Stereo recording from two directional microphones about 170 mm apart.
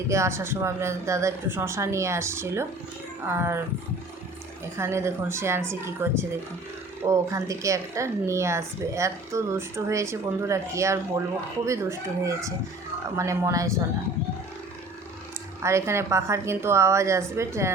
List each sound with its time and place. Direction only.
0.1 s a woman's voice: 15° right (ahead or behind)
4.8 s a woman's voice: 15° right (ahead or behind)
15.6 s a woman's voice: 15° right (ahead or behind)